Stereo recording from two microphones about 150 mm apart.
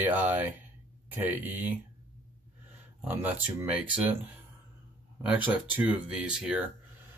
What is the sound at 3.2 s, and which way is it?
Speech, 10° right (ahead or behind).